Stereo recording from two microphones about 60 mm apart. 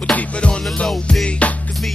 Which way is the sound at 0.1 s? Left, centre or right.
Left.